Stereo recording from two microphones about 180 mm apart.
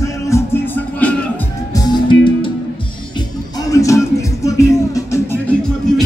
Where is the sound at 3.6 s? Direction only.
15° left (ahead or behind).